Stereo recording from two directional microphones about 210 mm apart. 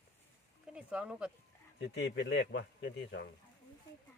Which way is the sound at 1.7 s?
55° left (ahead or behind).